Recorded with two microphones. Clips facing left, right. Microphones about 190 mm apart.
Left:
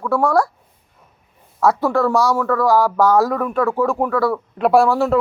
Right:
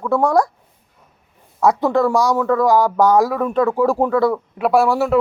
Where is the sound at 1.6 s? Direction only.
15° right (ahead or behind).